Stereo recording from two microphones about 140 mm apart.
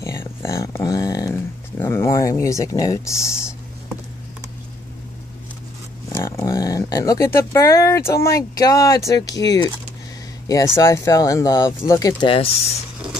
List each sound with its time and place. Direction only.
0.0 s speech: 20° left (ahead or behind)
6.0 s speech: 20° left (ahead or behind)
12.2 s speech: 40° left (ahead or behind)